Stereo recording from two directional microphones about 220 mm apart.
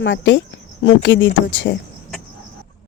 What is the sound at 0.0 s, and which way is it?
Speech, 55° left (ahead or behind).